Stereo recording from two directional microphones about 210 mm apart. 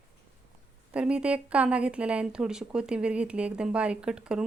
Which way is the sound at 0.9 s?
5° right (ahead or behind).